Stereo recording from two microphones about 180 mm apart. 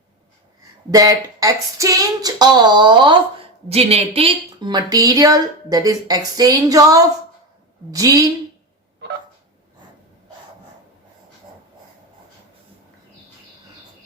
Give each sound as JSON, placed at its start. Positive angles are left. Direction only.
{"t": 0.9, "sound": "speech", "side_deg": -20}